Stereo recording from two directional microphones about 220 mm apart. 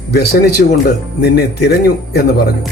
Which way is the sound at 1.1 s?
45° left (ahead or behind).